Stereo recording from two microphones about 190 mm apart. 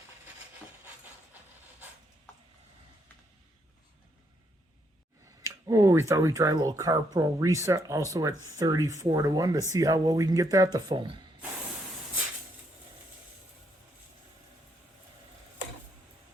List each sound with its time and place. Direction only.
5.4 s speech: 15° right (ahead or behind)